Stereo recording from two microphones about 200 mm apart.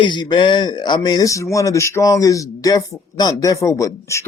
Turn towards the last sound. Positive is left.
turn(degrees=15)  # may be behind; listen again after turning